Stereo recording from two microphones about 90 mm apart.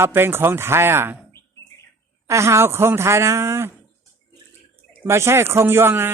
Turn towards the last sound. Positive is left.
turn(degrees=-25)  # may be behind; listen again after turning